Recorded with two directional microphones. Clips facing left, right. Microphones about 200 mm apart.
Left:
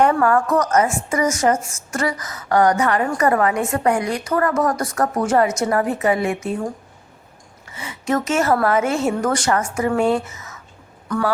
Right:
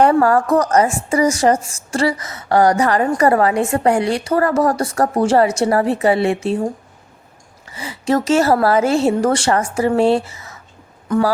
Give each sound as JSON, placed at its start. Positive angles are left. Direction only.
{"t": 0.0, "sound": "a woman's voice", "side_deg": -35}
{"t": 7.7, "sound": "a woman's voice", "side_deg": -35}